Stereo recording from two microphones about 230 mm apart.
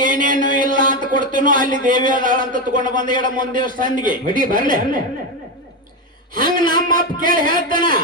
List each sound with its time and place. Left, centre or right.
0.0 s a sound: right
2.0 s a man's voice: right
6.7 s a man's voice: right